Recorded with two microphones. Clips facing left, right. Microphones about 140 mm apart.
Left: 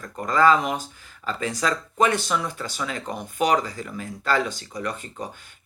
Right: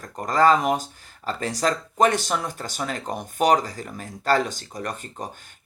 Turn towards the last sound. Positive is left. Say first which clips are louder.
# even
turn(degrees=-45)  # may be behind; listen again after turning